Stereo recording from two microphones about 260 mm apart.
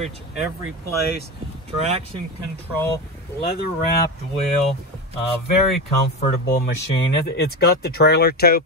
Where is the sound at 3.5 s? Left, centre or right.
Left.